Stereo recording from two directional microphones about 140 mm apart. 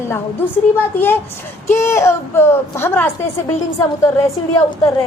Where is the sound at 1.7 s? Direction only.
20° left (ahead or behind).